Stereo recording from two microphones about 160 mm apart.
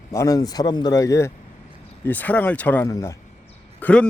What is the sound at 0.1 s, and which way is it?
Speech, 20° left (ahead or behind).